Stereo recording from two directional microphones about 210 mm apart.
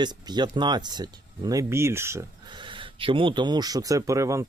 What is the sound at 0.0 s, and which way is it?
Speech, 20° right (ahead or behind).